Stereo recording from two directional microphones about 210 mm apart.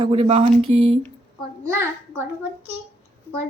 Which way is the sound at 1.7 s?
10° right (ahead or behind).